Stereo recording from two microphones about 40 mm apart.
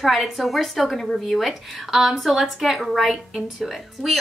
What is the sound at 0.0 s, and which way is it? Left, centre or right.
A woman's voice, centre.